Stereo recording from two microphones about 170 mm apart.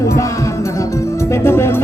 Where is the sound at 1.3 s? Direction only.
15° left (ahead or behind).